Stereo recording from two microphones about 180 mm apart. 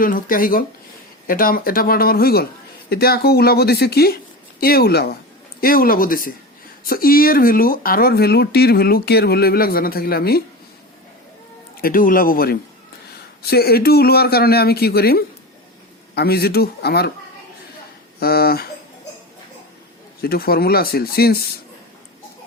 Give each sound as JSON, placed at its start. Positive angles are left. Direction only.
{"t": 0.0, "sound": "speech", "side_deg": 50}
{"t": 11.8, "sound": "speech", "side_deg": 50}
{"t": 18.2, "sound": "speech", "side_deg": 60}
{"t": 20.2, "sound": "speech", "side_deg": 55}